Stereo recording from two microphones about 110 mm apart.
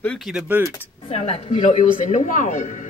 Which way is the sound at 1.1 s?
65° left (ahead or behind).